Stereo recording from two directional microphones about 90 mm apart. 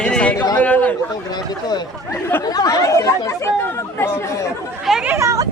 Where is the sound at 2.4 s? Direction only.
45° left (ahead or behind).